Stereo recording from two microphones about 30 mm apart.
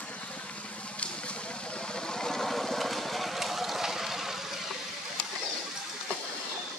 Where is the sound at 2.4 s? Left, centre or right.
Centre.